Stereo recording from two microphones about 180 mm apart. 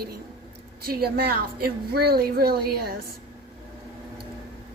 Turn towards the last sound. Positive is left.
turn(degrees=-60)  # may be behind; listen again after turning